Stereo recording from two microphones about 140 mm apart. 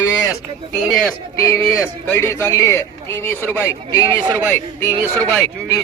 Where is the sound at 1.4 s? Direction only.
15° left (ahead or behind).